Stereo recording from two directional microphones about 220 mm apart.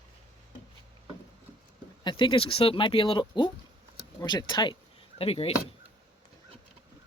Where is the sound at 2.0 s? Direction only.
20° left (ahead or behind).